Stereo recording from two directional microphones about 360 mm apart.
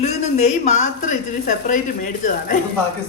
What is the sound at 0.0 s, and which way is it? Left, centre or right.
A woman's voice, centre.